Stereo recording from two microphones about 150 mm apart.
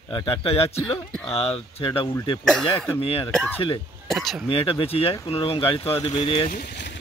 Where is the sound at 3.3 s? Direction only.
5° left (ahead or behind).